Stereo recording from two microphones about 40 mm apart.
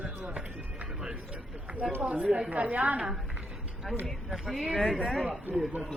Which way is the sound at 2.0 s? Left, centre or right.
Right.